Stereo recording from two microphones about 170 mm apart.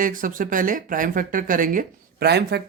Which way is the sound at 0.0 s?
55° right (ahead or behind).